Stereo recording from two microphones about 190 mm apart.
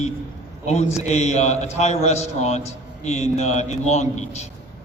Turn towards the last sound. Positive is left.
turn(degrees=35)  # may be behind; listen again after turning